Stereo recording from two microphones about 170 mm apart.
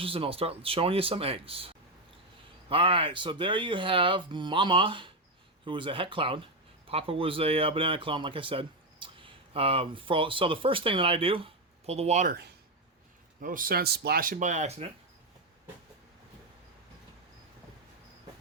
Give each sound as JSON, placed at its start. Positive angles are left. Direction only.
{"t": 0.0, "sound": "speech", "side_deg": -35}
{"t": 13.4, "sound": "speech", "side_deg": -55}